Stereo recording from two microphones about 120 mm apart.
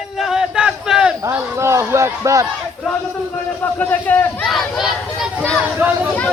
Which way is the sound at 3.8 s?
15° left (ahead or behind).